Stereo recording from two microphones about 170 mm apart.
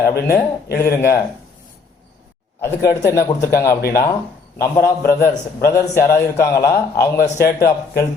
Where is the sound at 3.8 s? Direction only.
60° left (ahead or behind).